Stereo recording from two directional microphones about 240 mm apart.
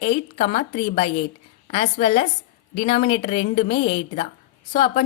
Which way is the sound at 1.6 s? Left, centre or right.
Left.